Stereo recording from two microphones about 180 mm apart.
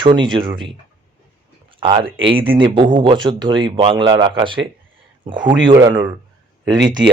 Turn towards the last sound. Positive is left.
turn(degrees=-25)  # may be behind; listen again after turning